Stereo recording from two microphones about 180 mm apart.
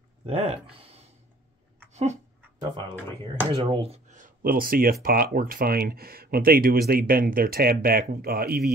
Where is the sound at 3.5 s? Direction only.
30° right (ahead or behind).